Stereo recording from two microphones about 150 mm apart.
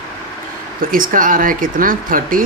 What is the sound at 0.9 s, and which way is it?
Speech, 65° right (ahead or behind).